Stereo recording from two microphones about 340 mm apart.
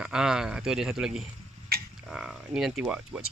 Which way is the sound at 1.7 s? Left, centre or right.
Right.